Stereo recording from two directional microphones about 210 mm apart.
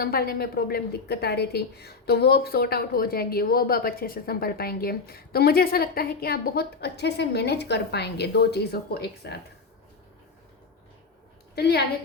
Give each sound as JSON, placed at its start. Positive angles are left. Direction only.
{"t": 0.0, "sound": "a woman's voice", "side_deg": 45}
{"t": 11.5, "sound": "a woman's voice", "side_deg": 50}